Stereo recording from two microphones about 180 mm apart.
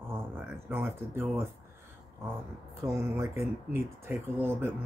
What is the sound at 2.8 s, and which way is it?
Speech, 15° right (ahead or behind).